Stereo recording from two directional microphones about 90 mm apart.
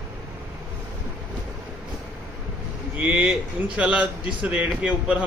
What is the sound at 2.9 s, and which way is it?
Speech, 15° right (ahead or behind).